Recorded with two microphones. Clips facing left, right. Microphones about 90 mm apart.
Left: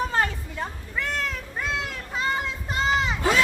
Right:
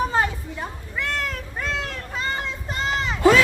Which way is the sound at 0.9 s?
Centre (ahead or behind).